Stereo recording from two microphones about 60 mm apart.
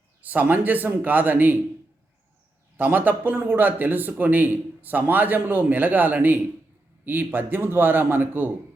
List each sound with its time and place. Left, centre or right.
0.2 s speech: right
2.7 s speech: right